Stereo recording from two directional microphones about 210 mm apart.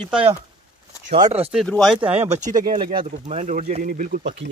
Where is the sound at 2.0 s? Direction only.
30° right (ahead or behind).